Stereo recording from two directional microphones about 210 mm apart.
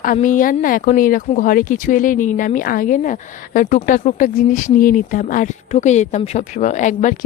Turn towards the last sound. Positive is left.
turn(degrees=35)  # may be behind; listen again after turning